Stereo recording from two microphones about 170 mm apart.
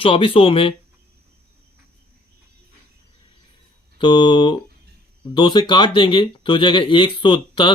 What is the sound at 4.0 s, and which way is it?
Speech, 25° left (ahead or behind).